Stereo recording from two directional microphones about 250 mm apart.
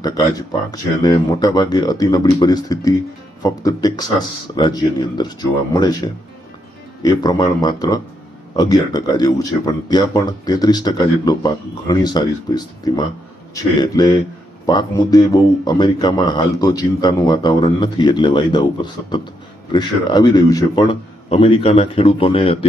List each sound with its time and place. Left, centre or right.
0.0 s a man's voice: centre
14.7 s a man's voice: centre